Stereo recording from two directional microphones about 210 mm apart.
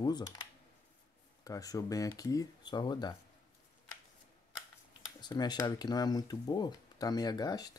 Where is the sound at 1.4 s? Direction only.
15° left (ahead or behind).